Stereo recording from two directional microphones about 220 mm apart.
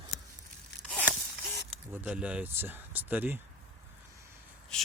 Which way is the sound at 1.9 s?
10° right (ahead or behind).